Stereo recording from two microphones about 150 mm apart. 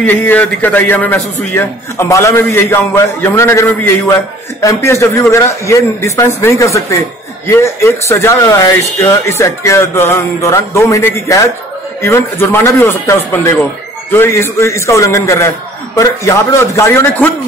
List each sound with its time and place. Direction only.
0.0 s a man's voice: 10° left (ahead or behind)